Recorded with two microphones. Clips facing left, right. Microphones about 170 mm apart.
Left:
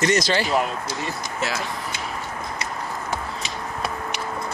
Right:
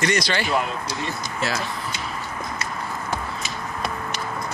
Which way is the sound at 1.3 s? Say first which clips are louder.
Right 1 dB; 20° left (ahead or behind).